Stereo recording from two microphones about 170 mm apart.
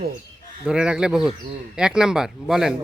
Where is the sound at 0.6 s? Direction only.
5° right (ahead or behind).